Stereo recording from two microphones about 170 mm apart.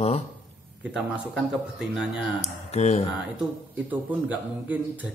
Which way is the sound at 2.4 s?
40° left (ahead or behind).